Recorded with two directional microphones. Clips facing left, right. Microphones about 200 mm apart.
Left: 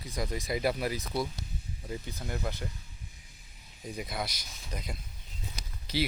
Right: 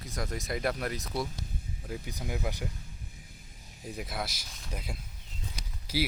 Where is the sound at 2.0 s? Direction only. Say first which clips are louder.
Right 2 dB; 10° right (ahead or behind).